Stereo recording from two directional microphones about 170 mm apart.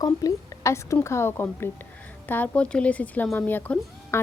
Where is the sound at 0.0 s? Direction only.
20° left (ahead or behind).